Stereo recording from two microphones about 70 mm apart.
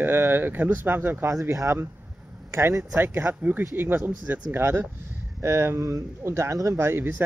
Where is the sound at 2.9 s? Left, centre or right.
Right.